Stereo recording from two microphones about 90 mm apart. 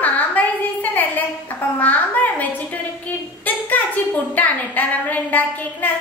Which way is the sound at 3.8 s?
20° left (ahead or behind).